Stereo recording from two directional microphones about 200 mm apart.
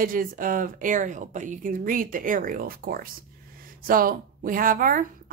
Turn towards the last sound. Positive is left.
turn(degrees=-45)  # may be behind; listen again after turning